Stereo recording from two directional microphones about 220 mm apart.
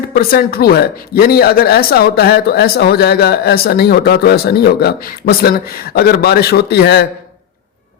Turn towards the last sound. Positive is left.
turn(degrees=45)  # may be behind; listen again after turning